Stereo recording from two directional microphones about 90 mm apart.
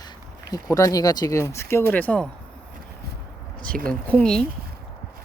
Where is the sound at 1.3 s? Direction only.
30° left (ahead or behind).